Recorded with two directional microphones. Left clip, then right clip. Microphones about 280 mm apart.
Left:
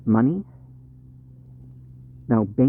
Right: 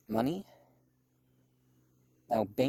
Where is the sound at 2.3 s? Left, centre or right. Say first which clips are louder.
Left 8 dB; right.